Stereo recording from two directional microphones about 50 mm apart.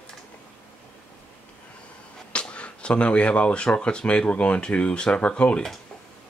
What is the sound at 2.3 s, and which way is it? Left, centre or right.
Speech, left.